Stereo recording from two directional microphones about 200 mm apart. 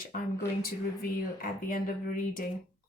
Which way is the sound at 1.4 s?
45° left (ahead or behind).